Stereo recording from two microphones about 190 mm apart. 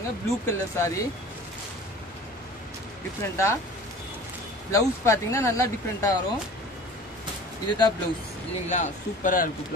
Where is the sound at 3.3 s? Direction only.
15° left (ahead or behind).